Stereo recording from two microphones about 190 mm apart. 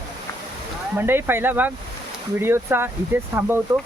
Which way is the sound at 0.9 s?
10° right (ahead or behind).